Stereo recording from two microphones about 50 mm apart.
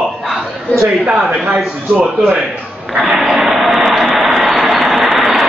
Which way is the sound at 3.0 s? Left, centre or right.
Centre.